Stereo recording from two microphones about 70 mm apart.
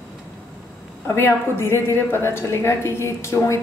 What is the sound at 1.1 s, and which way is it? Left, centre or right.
A woman's voice, left.